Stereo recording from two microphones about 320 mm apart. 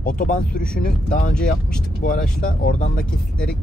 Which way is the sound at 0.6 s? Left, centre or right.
Centre.